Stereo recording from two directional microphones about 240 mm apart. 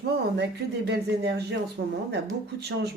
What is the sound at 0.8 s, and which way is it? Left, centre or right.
Speech, right.